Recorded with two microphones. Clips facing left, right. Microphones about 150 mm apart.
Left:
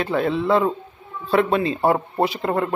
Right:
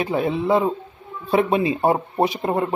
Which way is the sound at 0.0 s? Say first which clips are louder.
Even; 15° right (ahead or behind).